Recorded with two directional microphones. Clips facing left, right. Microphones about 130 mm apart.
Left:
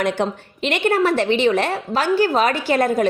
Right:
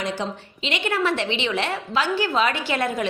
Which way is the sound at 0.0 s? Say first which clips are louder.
Left 7 dB; 55° left (ahead or behind).